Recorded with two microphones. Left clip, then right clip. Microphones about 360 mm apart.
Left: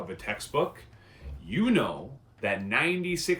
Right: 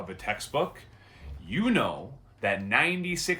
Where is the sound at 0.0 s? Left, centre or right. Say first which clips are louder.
Right 2 dB; centre.